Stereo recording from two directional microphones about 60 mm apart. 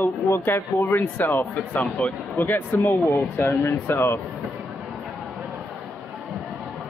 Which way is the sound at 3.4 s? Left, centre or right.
Left.